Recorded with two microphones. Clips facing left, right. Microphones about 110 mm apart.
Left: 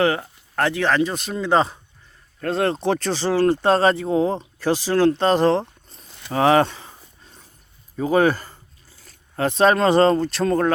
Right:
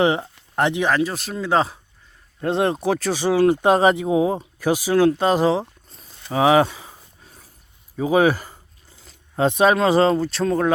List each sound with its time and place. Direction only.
0.0 s speech: 20° right (ahead or behind)
0.9 s speech: 5° right (ahead or behind)
2.4 s speech: 20° right (ahead or behind)
6.3 s a sound: 5° right (ahead or behind)
7.9 s speech: 10° right (ahead or behind)
9.0 s a sound: 20° right (ahead or behind)
9.6 s speech: 5° right (ahead or behind)